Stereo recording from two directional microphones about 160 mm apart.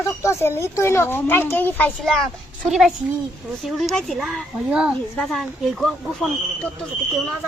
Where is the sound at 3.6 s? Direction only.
Centre (ahead or behind).